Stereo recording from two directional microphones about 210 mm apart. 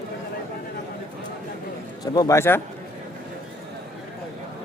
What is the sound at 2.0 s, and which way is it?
Speech, 15° left (ahead or behind).